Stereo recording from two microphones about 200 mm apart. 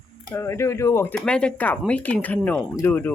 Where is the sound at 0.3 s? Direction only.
15° left (ahead or behind).